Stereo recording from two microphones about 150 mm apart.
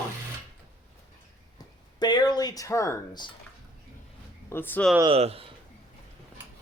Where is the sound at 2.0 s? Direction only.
30° left (ahead or behind).